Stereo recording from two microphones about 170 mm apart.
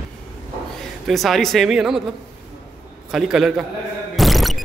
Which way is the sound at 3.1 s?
Centre (ahead or behind).